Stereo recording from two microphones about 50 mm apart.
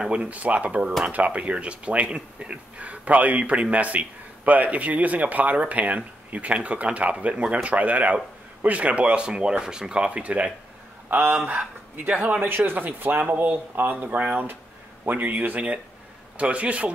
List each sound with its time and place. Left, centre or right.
0.0 s speech: centre
0.3 s speech: right